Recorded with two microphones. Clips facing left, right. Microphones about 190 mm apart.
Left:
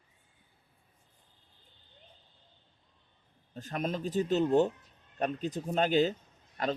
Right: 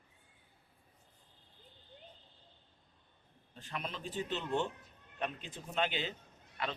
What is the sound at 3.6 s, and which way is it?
Speech, 40° left (ahead or behind).